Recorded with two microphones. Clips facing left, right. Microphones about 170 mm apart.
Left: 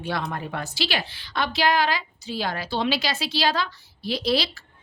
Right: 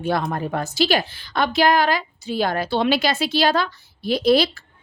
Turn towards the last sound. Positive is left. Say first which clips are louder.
# right 7 dB
turn(degrees=-50)  # may be behind; listen again after turning